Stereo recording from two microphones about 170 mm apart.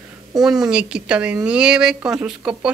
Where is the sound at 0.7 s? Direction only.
5° right (ahead or behind).